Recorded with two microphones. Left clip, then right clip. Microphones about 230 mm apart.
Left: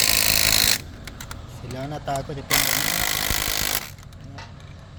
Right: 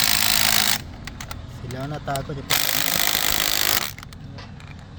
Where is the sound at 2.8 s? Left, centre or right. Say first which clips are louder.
Right 2 dB; right.